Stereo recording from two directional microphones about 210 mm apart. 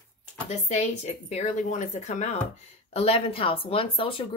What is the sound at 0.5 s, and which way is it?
Speech, 30° left (ahead or behind).